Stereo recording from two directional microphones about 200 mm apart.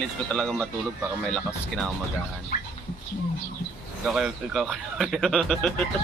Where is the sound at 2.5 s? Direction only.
45° left (ahead or behind).